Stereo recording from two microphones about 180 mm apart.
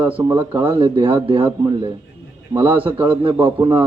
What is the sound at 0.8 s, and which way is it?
A man's voice, 30° right (ahead or behind).